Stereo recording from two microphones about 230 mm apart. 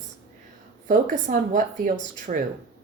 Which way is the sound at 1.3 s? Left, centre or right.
Right.